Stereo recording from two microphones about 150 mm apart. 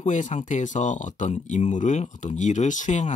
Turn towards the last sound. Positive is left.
turn(degrees=50)  # may be behind; listen again after turning